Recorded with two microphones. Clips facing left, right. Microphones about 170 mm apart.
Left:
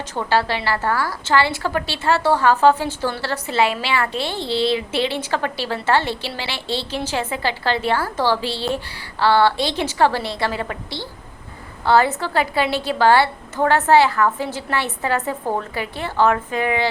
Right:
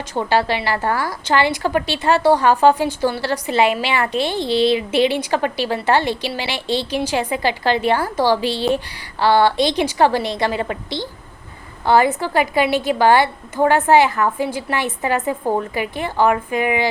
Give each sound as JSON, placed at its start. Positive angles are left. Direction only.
{"t": 0.1, "sound": "a woman's voice", "side_deg": -15}